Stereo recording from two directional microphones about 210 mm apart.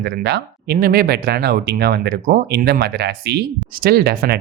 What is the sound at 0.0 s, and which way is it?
Speech, 50° right (ahead or behind).